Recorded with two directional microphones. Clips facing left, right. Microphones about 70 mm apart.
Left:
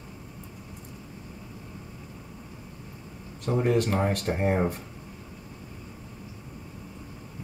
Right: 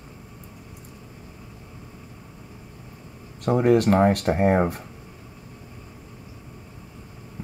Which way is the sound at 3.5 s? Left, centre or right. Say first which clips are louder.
Right 6 dB; right.